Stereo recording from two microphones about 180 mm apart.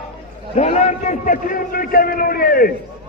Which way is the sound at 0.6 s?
40° left (ahead or behind).